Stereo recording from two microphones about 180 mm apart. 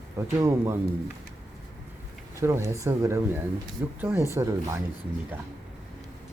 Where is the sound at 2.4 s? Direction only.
15° right (ahead or behind).